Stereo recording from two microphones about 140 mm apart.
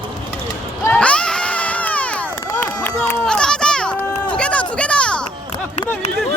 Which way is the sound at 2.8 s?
10° left (ahead or behind).